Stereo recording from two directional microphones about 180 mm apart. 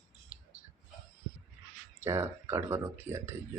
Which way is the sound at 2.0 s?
15° right (ahead or behind).